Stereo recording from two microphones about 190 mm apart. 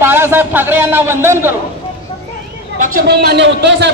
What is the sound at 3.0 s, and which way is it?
Speech, 60° right (ahead or behind).